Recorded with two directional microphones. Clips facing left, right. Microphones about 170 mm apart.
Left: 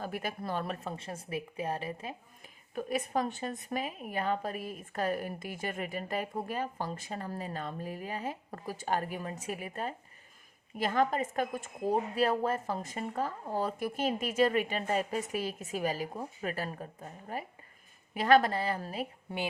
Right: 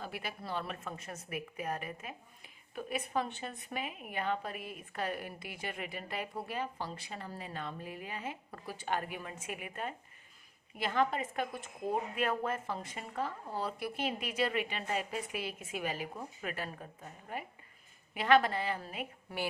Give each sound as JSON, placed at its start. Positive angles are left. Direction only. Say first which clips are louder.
{"t": 0.0, "sound": "speech", "louder": "left 5 dB", "side_deg": 45}
{"t": 0.9, "sound": "a woman's voice", "louder": "left 4 dB", "side_deg": 30}
{"t": 2.4, "sound": "a woman's voice", "louder": "left 5 dB", "side_deg": 45}